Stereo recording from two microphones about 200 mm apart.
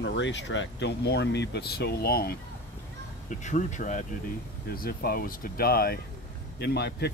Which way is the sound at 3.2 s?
35° left (ahead or behind).